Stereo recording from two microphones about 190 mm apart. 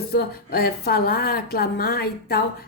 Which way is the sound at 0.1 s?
55° left (ahead or behind).